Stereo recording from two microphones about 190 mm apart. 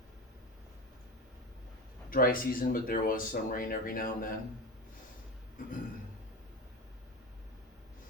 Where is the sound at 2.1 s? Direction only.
50° left (ahead or behind).